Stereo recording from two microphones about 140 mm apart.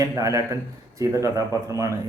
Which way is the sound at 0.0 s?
25° right (ahead or behind).